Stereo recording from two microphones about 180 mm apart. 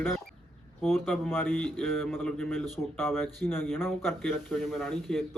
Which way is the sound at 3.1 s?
10° left (ahead or behind).